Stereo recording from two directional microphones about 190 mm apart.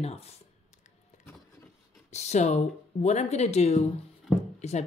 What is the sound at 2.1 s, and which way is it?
A woman's voice, 35° left (ahead or behind).